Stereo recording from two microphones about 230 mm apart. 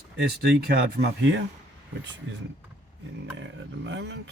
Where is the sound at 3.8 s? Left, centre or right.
Right.